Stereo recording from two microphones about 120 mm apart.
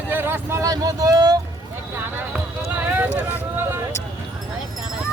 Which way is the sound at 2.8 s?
15° right (ahead or behind).